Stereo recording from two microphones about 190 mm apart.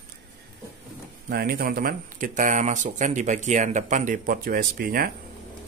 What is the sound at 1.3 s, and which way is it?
Speech, 50° right (ahead or behind).